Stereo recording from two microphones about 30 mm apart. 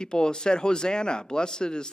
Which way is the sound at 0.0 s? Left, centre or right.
Left.